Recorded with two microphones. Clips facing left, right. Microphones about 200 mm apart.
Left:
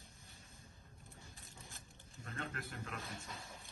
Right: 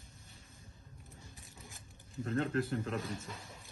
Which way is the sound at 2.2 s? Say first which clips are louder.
Right 13 dB; 30° right (ahead or behind).